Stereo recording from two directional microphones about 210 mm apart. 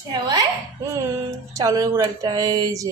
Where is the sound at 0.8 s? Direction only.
15° right (ahead or behind).